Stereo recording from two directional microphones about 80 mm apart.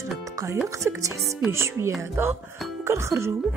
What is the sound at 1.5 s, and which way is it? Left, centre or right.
Speech, right.